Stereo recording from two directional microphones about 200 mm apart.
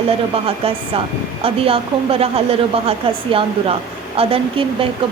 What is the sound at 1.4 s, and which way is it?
A woman's voice, 30° right (ahead or behind).